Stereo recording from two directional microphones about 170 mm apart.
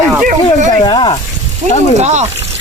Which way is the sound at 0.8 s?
30° left (ahead or behind).